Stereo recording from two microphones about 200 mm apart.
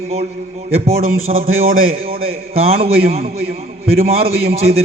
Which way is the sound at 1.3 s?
40° right (ahead or behind).